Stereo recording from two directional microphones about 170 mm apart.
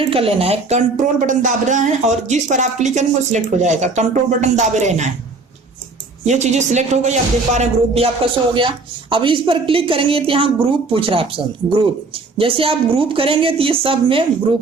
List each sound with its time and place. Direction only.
0.0 s speech: 35° right (ahead or behind)
6.2 s speech: 45° right (ahead or behind)